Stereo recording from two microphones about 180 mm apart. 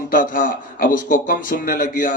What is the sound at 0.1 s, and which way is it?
A man's voice, 45° left (ahead or behind).